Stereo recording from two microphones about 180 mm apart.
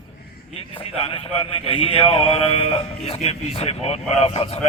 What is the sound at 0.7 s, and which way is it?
A man's voice, 30° left (ahead or behind).